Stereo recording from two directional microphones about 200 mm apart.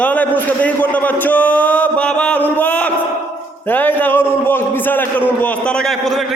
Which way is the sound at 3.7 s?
10° left (ahead or behind).